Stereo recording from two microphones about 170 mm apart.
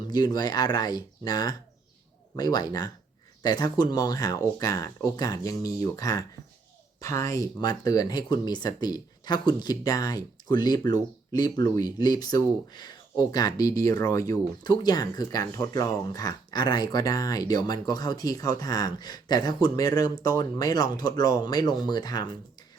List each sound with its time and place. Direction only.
0.1 s speech: 25° left (ahead or behind)